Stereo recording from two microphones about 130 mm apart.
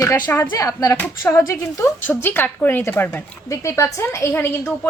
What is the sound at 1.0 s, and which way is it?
Speech, 15° left (ahead or behind).